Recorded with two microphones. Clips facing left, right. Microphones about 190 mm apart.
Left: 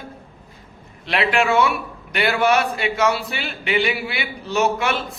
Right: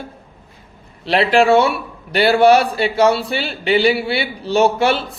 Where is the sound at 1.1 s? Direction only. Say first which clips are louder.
Right 7 dB; 35° right (ahead or behind).